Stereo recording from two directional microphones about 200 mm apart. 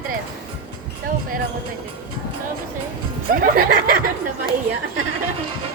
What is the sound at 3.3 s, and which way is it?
Speech, 45° right (ahead or behind).